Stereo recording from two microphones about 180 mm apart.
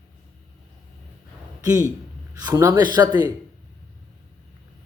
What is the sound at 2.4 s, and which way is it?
Speech, 20° right (ahead or behind).